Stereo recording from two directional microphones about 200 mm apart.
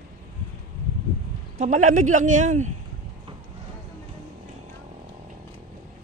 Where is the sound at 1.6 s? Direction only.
40° right (ahead or behind).